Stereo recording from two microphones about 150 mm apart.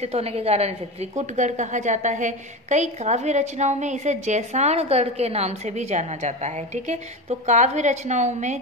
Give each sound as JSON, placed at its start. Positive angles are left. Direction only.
{"t": 0.0, "sound": "a woman's voice", "side_deg": -45}